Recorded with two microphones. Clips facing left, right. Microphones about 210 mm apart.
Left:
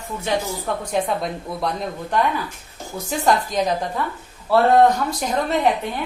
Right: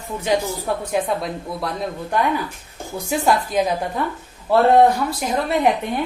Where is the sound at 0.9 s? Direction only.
Centre (ahead or behind).